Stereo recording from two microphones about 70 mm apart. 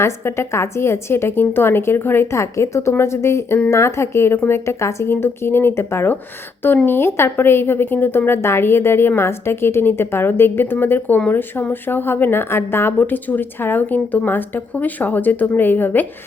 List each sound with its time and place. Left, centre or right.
0.0 s a woman's voice: left